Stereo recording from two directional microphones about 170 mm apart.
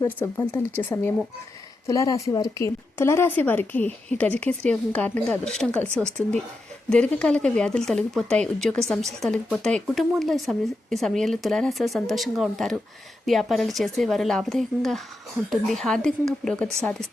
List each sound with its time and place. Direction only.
0.0 s speech: 15° left (ahead or behind)